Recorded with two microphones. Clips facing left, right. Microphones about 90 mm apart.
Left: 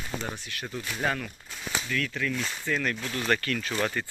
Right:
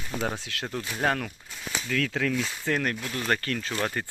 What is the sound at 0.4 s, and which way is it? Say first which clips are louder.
Speech: right 3 dB; 90° right.